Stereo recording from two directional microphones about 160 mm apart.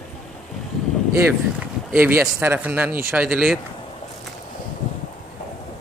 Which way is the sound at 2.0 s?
15° right (ahead or behind).